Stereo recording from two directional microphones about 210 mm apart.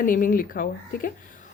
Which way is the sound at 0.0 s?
40° left (ahead or behind).